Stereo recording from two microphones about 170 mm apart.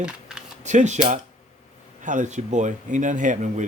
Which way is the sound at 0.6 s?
45° right (ahead or behind).